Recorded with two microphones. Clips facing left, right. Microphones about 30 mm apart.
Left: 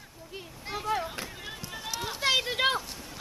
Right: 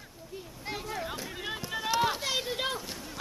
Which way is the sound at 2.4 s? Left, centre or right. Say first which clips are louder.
Left 5 dB; left.